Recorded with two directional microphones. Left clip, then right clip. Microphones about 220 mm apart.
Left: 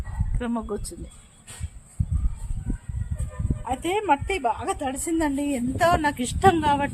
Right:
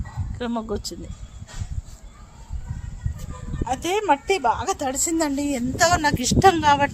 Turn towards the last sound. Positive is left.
turn(degrees=-45)  # may be behind; listen again after turning